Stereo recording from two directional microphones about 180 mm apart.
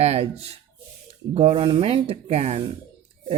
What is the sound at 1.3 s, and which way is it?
Speech, 30° right (ahead or behind).